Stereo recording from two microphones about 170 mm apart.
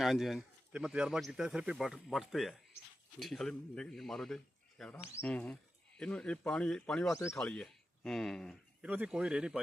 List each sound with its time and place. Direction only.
0.0 s speech: centre (ahead or behind)
7.1 s speech: 15° left (ahead or behind)
7.3 s speech: 5° left (ahead or behind)
8.8 s speech: 5° right (ahead or behind)